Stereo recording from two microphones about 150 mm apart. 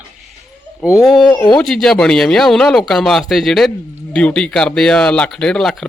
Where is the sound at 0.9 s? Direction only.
10° right (ahead or behind).